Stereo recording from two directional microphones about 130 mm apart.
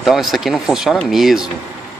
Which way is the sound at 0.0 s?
Centre (ahead or behind).